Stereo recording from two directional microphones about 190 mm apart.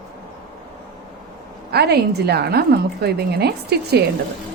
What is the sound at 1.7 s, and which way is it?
A woman's voice, 55° right (ahead or behind).